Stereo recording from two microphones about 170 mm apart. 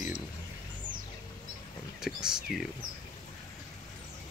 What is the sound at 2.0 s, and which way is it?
Speech, 5° right (ahead or behind).